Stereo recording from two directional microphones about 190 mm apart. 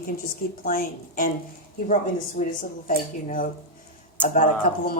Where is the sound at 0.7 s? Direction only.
45° left (ahead or behind).